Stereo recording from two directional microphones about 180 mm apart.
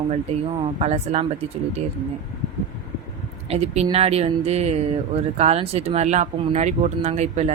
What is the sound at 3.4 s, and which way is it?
Speech, 35° right (ahead or behind).